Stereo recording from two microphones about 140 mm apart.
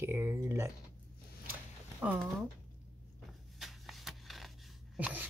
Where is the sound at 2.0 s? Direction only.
10° right (ahead or behind).